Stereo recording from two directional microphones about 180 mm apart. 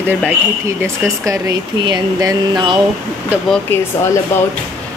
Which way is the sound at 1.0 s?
20° right (ahead or behind).